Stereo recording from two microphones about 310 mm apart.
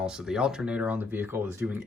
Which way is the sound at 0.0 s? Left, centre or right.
Centre.